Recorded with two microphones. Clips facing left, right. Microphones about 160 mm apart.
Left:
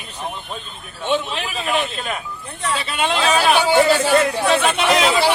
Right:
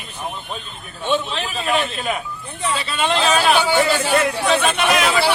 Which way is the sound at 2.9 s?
10° left (ahead or behind).